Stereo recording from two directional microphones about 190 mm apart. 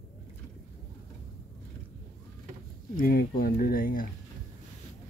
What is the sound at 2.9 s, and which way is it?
Speech, 50° left (ahead or behind).